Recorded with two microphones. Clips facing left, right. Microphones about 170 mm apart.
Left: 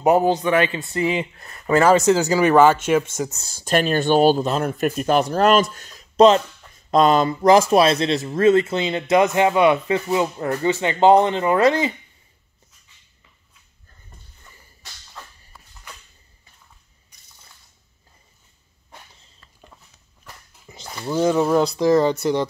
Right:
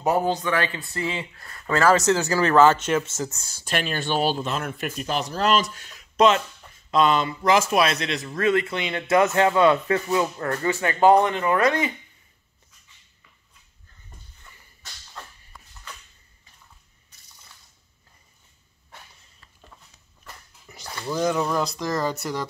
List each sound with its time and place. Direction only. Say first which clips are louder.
0.0 s speech: left 6 dB; 20° left (ahead or behind)
3.3 s speech: left 12 dB; 35° left (ahead or behind)
17.1 s squish: even; 15° left (ahead or behind)
20.6 s speech: left 2 dB; 25° left (ahead or behind)